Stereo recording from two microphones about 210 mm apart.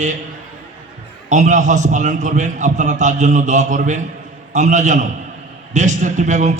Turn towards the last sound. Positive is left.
turn(degrees=-35)  # may be behind; listen again after turning